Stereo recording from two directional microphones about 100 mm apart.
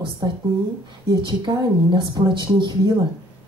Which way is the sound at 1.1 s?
50° right (ahead or behind).